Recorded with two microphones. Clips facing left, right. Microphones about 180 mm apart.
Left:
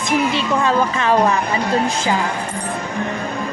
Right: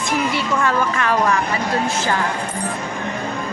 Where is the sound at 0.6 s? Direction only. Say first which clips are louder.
Left 2 dB; 20° left (ahead or behind).